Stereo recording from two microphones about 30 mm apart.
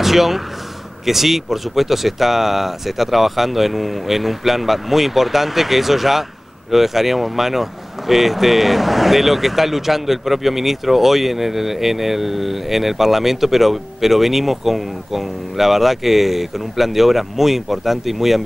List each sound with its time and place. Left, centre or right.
0.0 s speech: centre